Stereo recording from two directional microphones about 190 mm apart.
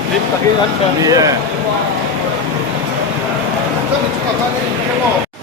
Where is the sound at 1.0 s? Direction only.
20° right (ahead or behind).